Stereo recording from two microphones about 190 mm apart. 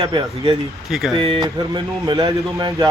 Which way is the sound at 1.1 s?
25° right (ahead or behind).